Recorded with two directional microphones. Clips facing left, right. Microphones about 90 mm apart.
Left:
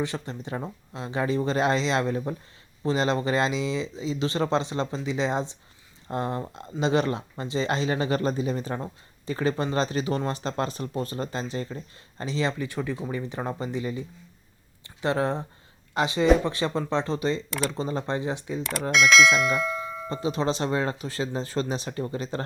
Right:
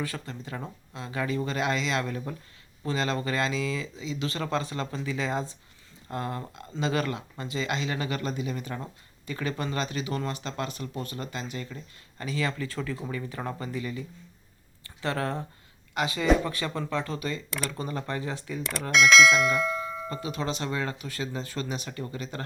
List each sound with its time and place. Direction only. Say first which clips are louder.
0.0 s speech: left 4 dB; 25° left (ahead or behind)
18.9 s speech: even; centre (ahead or behind)
20.2 s speech: left 7 dB; 30° left (ahead or behind)